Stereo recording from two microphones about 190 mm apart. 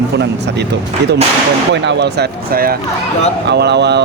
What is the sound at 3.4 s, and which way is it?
Speech, 65° right (ahead or behind).